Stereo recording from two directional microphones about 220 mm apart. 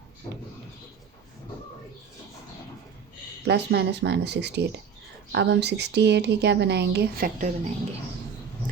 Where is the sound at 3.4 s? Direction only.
50° right (ahead or behind).